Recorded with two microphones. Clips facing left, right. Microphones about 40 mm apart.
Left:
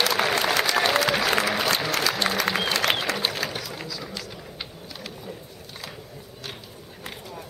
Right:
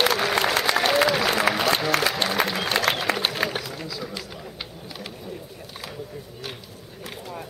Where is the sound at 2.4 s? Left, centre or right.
Right.